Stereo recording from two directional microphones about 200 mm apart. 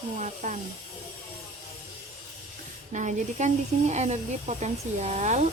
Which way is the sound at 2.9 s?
35° right (ahead or behind).